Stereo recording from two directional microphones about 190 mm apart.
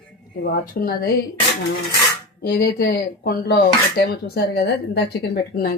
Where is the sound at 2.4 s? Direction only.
60° left (ahead or behind).